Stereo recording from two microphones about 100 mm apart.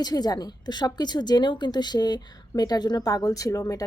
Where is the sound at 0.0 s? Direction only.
40° left (ahead or behind).